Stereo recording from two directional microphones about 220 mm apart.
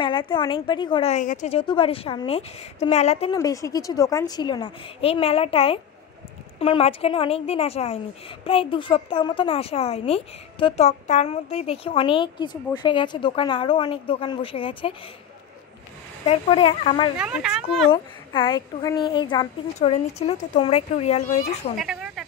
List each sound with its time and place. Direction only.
0.0 s a woman's voice: 20° left (ahead or behind)
3.3 s a woman's voice: 15° left (ahead or behind)
16.3 s a woman's voice: 25° left (ahead or behind)
17.2 s speech: 5° right (ahead or behind)
17.9 s a woman's voice: 20° left (ahead or behind)
21.7 s a sound: 5° right (ahead or behind)